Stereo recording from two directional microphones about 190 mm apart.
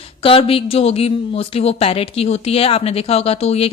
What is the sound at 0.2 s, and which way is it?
A woman's voice, 30° left (ahead or behind).